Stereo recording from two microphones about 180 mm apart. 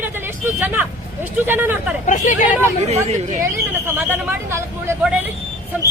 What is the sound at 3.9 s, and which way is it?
Speech, 15° right (ahead or behind).